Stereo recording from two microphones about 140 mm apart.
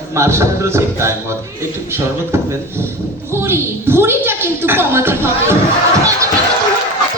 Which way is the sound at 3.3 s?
20° right (ahead or behind).